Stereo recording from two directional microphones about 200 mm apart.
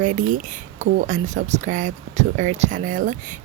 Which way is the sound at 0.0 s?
40° right (ahead or behind).